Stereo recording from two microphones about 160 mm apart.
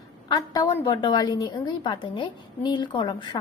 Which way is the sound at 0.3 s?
25° left (ahead or behind).